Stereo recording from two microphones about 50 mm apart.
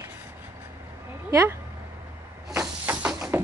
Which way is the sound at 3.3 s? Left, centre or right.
Right.